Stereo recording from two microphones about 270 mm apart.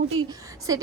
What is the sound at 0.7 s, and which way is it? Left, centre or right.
Speech, centre.